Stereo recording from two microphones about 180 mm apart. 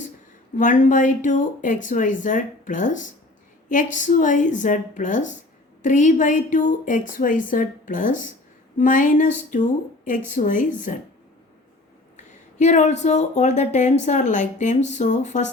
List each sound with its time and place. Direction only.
0.5 s speech: 45° left (ahead or behind)
12.1 s speech: 40° left (ahead or behind)